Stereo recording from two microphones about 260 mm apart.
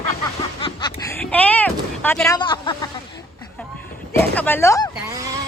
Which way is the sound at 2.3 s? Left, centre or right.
Centre.